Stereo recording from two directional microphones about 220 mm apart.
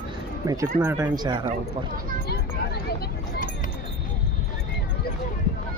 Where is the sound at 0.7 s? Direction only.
10° right (ahead or behind).